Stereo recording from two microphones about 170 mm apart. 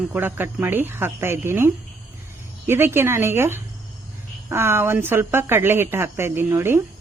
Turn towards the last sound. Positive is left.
turn(degrees=-15)  # may be behind; listen again after turning